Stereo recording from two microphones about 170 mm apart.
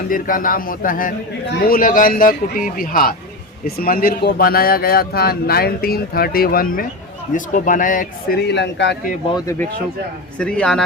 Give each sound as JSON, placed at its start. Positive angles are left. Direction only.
{"t": 0.1, "sound": "speech", "side_deg": 55}
{"t": 8.4, "sound": "speech", "side_deg": 90}
{"t": 9.3, "sound": "speech", "side_deg": 20}
{"t": 10.3, "sound": "a man's voice", "side_deg": 5}